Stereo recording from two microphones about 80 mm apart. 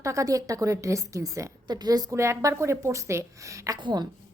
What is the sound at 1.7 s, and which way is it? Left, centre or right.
Speech, right.